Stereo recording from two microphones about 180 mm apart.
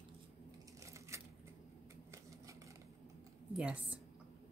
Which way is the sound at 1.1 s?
15° right (ahead or behind).